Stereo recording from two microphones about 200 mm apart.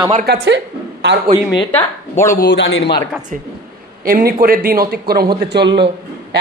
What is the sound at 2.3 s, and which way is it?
Speech, 60° left (ahead or behind).